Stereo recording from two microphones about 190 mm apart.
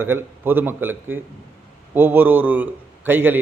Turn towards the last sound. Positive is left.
turn(degrees=-10)  # may be behind; listen again after turning